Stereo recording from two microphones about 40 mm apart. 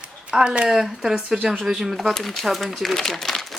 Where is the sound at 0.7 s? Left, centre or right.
Centre.